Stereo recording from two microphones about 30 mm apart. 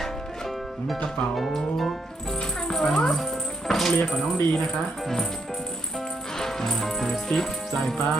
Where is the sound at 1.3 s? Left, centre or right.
Centre.